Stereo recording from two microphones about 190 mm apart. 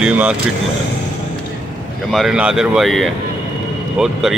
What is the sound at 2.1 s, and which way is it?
Speech, 5° right (ahead or behind).